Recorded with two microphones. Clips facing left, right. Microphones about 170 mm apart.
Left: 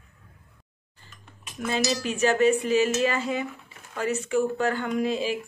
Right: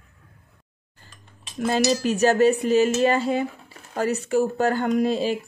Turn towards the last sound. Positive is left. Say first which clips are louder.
# right 4 dB
turn(degrees=-35)  # may be behind; listen again after turning